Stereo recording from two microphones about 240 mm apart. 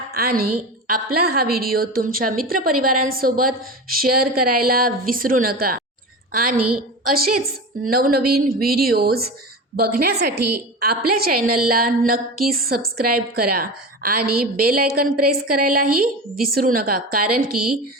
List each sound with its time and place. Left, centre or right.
0.1 s a woman's voice: right
10.3 s a woman's voice: right
10.8 s a woman's voice: right